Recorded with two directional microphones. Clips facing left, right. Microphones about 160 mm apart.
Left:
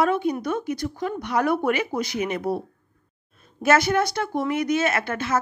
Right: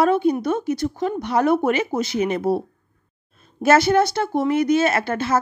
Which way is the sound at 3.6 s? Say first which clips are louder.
Right 4 dB; 30° right (ahead or behind).